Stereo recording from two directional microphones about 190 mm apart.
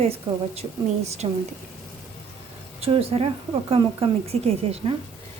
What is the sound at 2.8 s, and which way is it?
A woman's voice, 30° right (ahead or behind).